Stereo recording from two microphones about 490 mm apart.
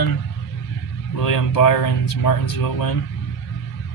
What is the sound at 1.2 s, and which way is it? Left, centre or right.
Speech, left.